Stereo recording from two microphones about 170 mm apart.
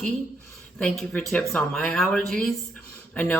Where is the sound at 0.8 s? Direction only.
5° left (ahead or behind).